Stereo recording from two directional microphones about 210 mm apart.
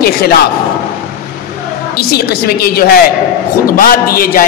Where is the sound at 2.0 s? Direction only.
45° left (ahead or behind).